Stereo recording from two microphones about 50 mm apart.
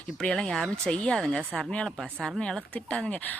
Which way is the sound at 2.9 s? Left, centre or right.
Left.